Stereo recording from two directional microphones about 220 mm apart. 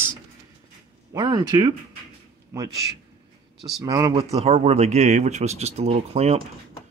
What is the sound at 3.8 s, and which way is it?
Speech, 20° right (ahead or behind).